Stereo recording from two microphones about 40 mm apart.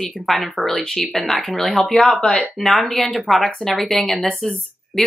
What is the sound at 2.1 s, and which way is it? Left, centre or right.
Speech, centre.